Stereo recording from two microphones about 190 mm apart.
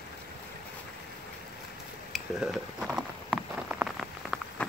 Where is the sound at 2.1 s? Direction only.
Centre (ahead or behind).